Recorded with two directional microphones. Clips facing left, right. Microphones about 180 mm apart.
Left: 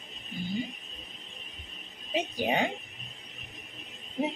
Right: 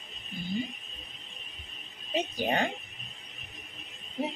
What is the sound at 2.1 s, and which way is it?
Speech, 10° left (ahead or behind).